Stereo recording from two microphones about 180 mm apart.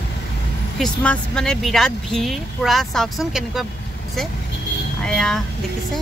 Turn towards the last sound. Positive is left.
turn(degrees=5)  # may be behind; listen again after turning